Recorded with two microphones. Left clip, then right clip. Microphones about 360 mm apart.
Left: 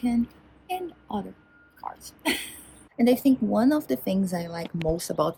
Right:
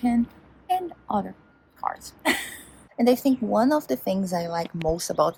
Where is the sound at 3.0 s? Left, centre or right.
Centre.